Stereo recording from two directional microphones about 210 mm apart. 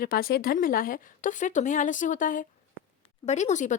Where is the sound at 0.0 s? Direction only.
45° left (ahead or behind).